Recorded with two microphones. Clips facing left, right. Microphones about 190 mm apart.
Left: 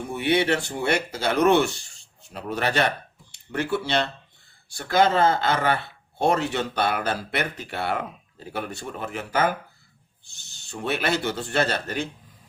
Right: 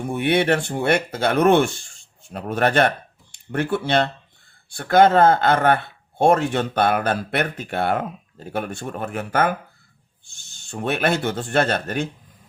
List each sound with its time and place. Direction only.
0.1 s speech: 55° right (ahead or behind)